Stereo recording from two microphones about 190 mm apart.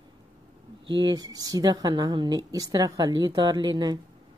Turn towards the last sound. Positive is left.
turn(degrees=-20)  # may be behind; listen again after turning